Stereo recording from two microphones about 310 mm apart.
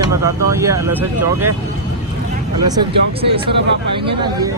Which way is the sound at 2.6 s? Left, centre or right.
Centre.